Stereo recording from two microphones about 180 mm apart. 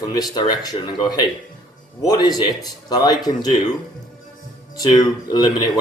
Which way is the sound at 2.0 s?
25° left (ahead or behind).